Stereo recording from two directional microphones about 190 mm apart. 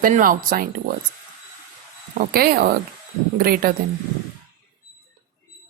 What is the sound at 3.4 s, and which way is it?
Speech, 50° right (ahead or behind).